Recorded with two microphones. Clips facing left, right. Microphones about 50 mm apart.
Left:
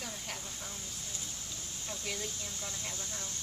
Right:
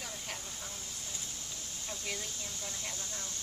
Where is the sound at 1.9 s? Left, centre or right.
Centre.